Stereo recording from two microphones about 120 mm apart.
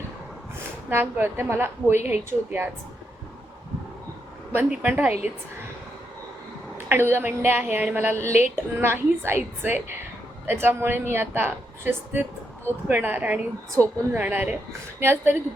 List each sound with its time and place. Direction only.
0.9 s a woman's voice: 20° right (ahead or behind)
4.5 s a woman's voice: 10° right (ahead or behind)
6.7 s a woman's voice: 20° right (ahead or behind)